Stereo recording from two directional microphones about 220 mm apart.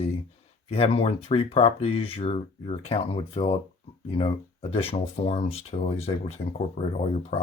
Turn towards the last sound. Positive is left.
turn(degrees=25)  # may be behind; listen again after turning